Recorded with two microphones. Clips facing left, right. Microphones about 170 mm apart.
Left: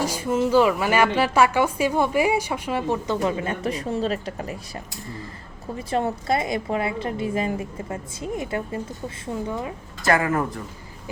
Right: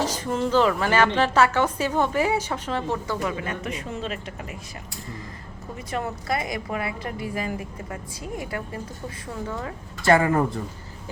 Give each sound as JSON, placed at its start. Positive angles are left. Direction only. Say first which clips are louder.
{"t": 0.0, "sound": "a woman's voice", "louder": "left 3 dB", "side_deg": 10}
{"t": 5.9, "sound": "a woman's voice", "louder": "left 5 dB", "side_deg": 25}
{"t": 10.1, "sound": "speech", "louder": "right 2 dB", "side_deg": -30}